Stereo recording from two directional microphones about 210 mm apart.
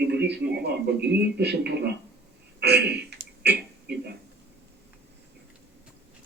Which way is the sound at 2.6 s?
50° right (ahead or behind).